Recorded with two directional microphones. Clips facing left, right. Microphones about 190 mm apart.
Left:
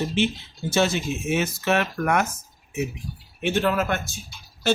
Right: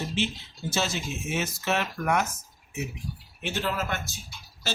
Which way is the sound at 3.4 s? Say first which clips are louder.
Left 8 dB; 55° left (ahead or behind).